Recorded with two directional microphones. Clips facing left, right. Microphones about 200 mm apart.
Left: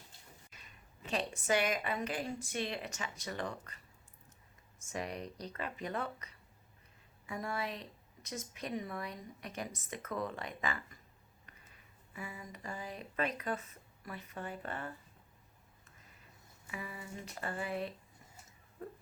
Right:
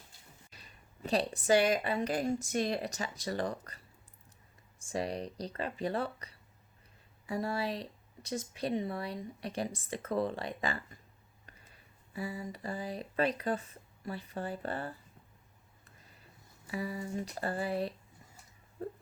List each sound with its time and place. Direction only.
0.5 s speech: 35° right (ahead or behind)
4.9 s speech: 35° right (ahead or behind)
16.6 s speech: 35° right (ahead or behind)